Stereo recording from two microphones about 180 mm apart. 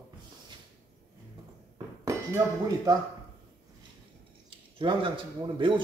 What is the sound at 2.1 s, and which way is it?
Speech, 15° right (ahead or behind).